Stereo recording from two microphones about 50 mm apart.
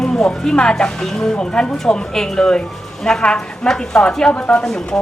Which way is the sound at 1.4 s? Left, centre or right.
Centre.